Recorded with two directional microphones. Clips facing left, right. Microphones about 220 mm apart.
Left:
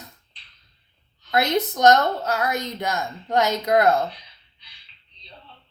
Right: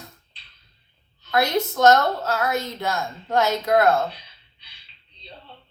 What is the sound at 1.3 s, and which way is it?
A woman's voice, 20° left (ahead or behind).